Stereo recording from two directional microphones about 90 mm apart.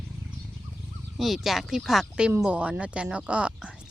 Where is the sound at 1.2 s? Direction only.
Centre (ahead or behind).